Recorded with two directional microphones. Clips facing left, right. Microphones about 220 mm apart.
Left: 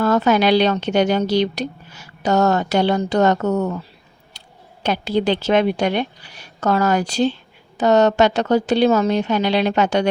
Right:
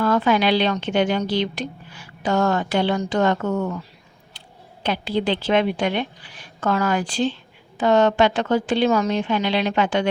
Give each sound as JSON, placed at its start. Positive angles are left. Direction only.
{"t": 0.0, "sound": "a woman's voice", "side_deg": 40}